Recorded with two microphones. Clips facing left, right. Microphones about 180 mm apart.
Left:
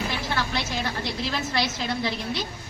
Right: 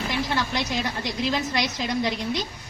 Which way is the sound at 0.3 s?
15° right (ahead or behind).